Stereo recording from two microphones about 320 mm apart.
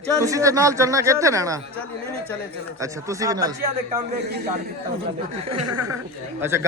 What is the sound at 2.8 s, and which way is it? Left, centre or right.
Speech, centre.